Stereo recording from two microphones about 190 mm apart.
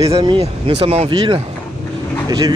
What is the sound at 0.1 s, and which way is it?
Speech, 25° right (ahead or behind).